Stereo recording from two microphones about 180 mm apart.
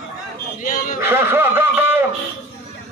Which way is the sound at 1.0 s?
10° right (ahead or behind).